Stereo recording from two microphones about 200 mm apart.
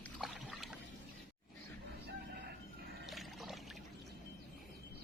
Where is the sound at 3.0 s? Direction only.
Centre (ahead or behind).